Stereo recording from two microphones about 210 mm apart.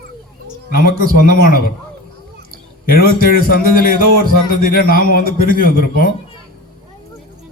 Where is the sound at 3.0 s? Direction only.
45° left (ahead or behind).